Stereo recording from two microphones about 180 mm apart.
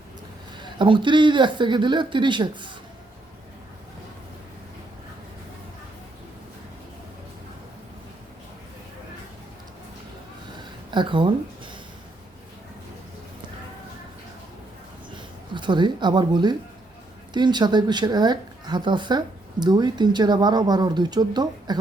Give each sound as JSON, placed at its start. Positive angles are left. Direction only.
{"t": 0.5, "sound": "speech", "side_deg": -25}
{"t": 10.9, "sound": "speech", "side_deg": -25}
{"t": 15.1, "sound": "a sound", "side_deg": -25}
{"t": 17.3, "sound": "speech", "side_deg": -25}